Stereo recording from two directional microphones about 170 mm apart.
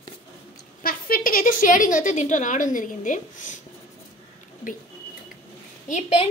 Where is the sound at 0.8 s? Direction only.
60° left (ahead or behind).